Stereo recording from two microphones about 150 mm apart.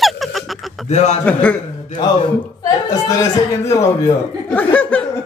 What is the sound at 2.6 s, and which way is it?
Speech, 25° left (ahead or behind).